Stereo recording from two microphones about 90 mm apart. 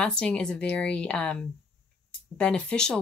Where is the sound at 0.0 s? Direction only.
10° left (ahead or behind).